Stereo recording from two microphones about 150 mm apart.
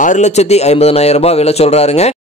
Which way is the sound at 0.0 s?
55° left (ahead or behind).